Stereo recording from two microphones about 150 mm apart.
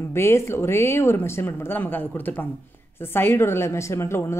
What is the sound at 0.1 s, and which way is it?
A woman's voice, 15° left (ahead or behind).